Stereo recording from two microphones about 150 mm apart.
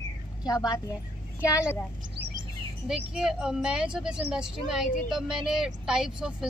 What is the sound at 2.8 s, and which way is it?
Speech, 5° right (ahead or behind).